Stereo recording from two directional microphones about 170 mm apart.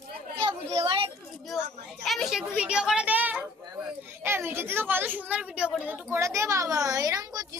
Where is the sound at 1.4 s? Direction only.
Centre (ahead or behind).